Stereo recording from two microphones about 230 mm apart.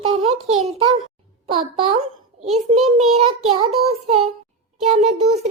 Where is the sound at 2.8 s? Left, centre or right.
Right.